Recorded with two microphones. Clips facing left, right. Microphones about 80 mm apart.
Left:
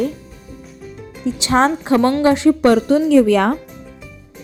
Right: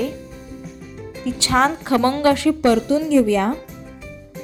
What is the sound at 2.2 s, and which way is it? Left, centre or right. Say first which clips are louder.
Speech: left 3 dB; left.